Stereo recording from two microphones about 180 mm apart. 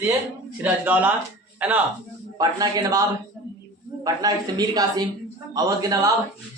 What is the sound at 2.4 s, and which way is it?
A man's voice, 20° right (ahead or behind).